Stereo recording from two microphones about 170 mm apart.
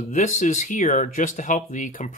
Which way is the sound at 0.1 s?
45° left (ahead or behind).